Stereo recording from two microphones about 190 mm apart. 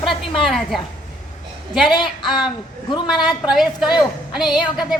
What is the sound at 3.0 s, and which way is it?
Speech, centre (ahead or behind).